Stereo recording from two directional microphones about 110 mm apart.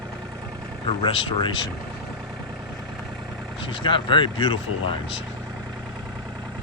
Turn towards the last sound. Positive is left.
turn(degrees=50)  # may be behind; listen again after turning